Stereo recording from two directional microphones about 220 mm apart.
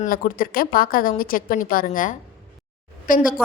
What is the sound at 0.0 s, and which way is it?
A woman's voice, 40° left (ahead or behind).